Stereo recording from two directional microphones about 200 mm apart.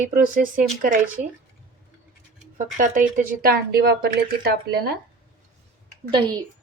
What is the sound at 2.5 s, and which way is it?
A woman's voice, 40° right (ahead or behind).